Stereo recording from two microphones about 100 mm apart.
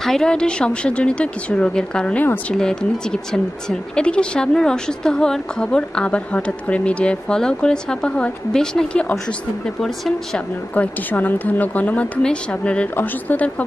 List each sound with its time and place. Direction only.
0.0 s speech: 5° left (ahead or behind)
10.7 s speech: 15° left (ahead or behind)